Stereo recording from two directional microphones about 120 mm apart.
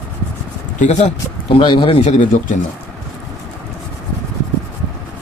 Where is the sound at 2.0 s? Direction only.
80° left.